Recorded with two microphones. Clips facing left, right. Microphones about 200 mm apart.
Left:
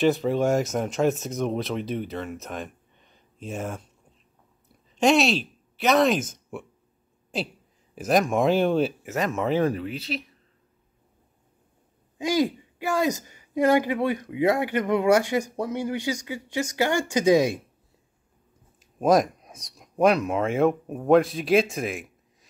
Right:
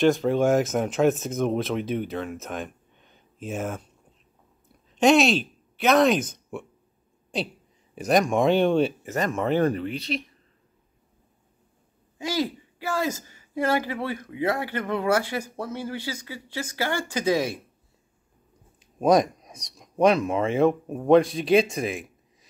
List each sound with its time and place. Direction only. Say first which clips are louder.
0.0 s speech: right 1 dB; centre (ahead or behind)
4.9 s speech: right 2 dB; centre (ahead or behind)
7.9 s speech: right 1 dB; centre (ahead or behind)
12.2 s a woman's voice: left 4 dB; 20° left (ahead or behind)
18.8 s speech: even; centre (ahead or behind)